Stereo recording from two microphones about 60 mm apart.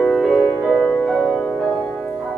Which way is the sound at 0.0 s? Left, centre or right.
Centre.